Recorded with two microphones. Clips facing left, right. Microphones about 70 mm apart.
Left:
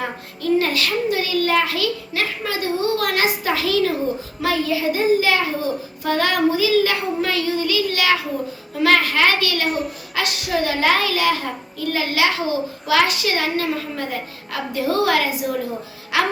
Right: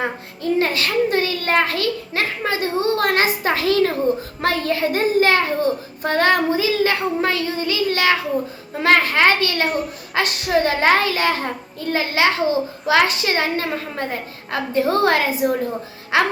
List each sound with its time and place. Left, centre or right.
0.0 s a child's voice: right
9.6 s a child's voice: centre
10.2 s a child's voice: right